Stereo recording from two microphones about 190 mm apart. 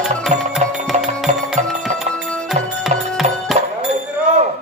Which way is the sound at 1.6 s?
40° right (ahead or behind).